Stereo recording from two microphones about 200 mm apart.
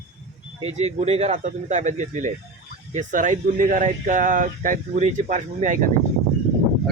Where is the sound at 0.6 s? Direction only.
35° right (ahead or behind).